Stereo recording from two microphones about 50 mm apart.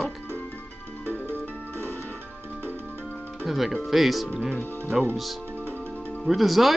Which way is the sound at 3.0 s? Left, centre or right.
Left.